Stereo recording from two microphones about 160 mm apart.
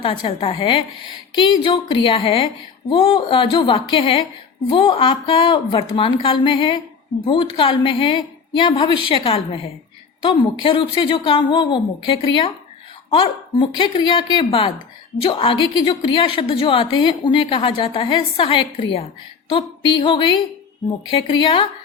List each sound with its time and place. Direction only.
0.0 s a woman's voice: 35° left (ahead or behind)
19.5 s a sound: 30° left (ahead or behind)
21.1 s a woman's voice: 30° left (ahead or behind)